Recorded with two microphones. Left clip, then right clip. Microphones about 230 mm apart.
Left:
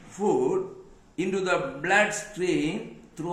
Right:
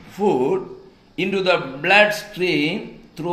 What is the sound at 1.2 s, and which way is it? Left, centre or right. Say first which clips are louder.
A man's voice: right 7 dB; right.